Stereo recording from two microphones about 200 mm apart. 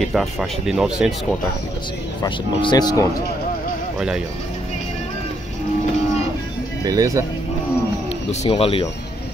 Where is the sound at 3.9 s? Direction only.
5° right (ahead or behind).